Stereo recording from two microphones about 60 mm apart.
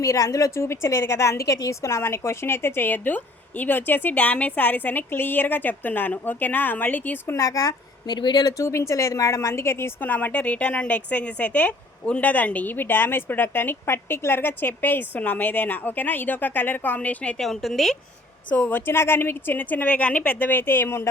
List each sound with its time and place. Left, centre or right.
0.0 s a woman's voice: left
7.3 s speech: left
8.4 s a woman's voice: left
10.0 s a woman's voice: left
17.3 s a woman's voice: centre
18.5 s a woman's voice: left
18.9 s a woman's voice: left